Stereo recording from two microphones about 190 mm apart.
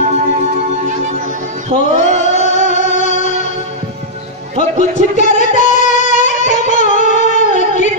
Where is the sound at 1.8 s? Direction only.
40° left (ahead or behind).